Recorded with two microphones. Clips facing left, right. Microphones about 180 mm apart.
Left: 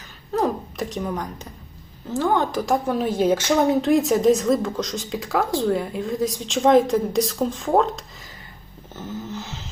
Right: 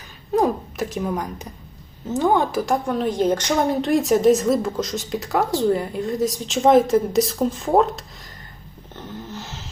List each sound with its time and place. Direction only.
0.3 s a sound: 15° right (ahead or behind)
0.8 s a woman's voice: 5° right (ahead or behind)
2.0 s a woman's voice: 20° right (ahead or behind)
2.6 s a woman's voice: centre (ahead or behind)
9.0 s snoring: centre (ahead or behind)